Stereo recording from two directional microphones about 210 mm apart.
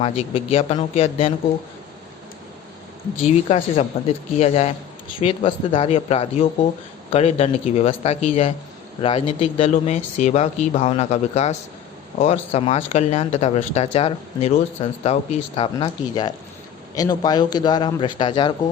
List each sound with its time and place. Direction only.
0.0 s speech: 25° left (ahead or behind)
3.2 s speech: 30° left (ahead or behind)